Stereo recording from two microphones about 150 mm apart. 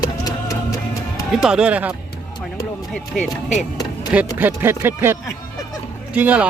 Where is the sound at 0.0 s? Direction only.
25° left (ahead or behind).